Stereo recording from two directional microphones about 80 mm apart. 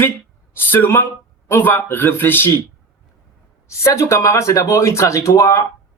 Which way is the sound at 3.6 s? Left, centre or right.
Left.